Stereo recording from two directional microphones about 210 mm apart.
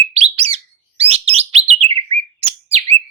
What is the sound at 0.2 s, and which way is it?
Bird, 30° right (ahead or behind).